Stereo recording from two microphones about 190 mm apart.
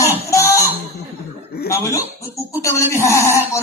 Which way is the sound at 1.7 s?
15° left (ahead or behind).